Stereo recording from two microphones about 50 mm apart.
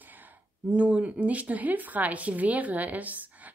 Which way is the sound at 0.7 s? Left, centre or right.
Right.